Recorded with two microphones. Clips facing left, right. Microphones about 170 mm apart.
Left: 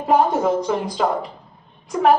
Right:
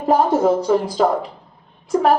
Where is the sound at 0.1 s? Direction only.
35° right (ahead or behind).